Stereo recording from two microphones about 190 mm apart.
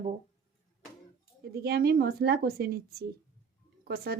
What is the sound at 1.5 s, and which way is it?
A woman's voice, 55° right (ahead or behind).